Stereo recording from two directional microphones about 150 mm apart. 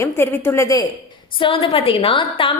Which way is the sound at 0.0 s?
15° left (ahead or behind).